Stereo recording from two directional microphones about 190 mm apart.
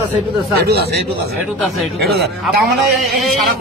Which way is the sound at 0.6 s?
55° right (ahead or behind).